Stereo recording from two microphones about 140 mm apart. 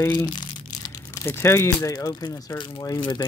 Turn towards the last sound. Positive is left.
turn(degrees=30)  # may be behind; listen again after turning